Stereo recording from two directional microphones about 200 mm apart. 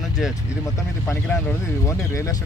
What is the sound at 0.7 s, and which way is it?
Speech, 10° left (ahead or behind).